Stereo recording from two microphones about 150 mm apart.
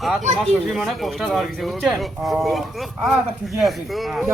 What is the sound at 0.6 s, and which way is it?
Speech, centre (ahead or behind).